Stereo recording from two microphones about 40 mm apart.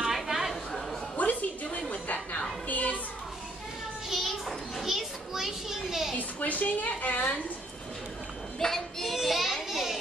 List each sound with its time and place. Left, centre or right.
0.0 s chatter: centre
1.1 s a sound: left
4.1 s children playing: centre
6.1 s a sound: left
8.5 s child singing: centre
9.0 s children playing: centre